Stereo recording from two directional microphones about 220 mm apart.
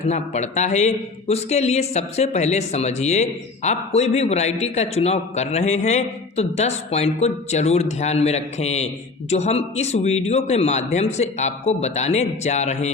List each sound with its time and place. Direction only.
0.0 s speech: 30° left (ahead or behind)